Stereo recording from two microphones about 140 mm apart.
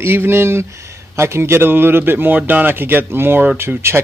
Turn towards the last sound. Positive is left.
turn(degrees=-15)  # may be behind; listen again after turning